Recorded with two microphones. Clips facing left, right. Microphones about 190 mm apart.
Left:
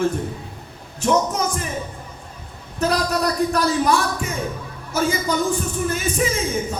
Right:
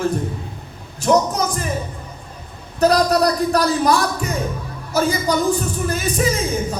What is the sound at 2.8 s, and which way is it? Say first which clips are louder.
Speech: right 6 dB; 40° right (ahead or behind).